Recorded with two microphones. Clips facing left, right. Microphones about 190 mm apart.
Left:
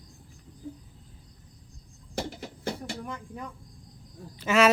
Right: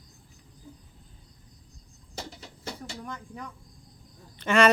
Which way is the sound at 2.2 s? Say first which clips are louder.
Left 7 dB; 55° left (ahead or behind).